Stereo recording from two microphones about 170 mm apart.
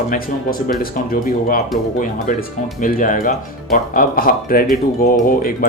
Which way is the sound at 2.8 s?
55° left (ahead or behind).